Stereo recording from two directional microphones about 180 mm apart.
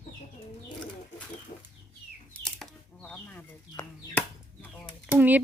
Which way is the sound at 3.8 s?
20° left (ahead or behind).